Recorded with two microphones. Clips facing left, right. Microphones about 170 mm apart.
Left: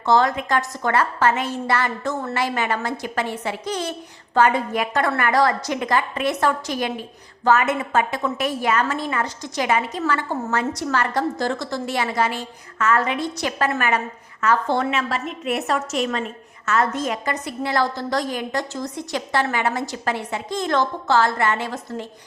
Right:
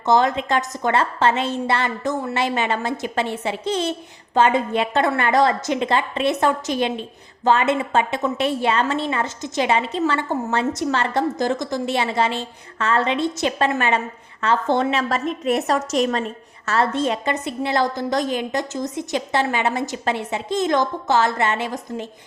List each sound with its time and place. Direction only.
0.0 s a woman's voice: 20° right (ahead or behind)
14.9 s a woman's voice: 40° right (ahead or behind); by 22.0 s 20° right (ahead or behind)